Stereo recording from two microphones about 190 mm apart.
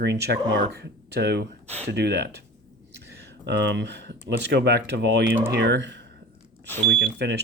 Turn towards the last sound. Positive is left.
turn(degrees=-65)  # may be behind; listen again after turning